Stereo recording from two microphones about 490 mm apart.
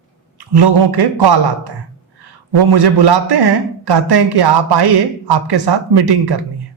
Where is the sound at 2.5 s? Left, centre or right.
Right.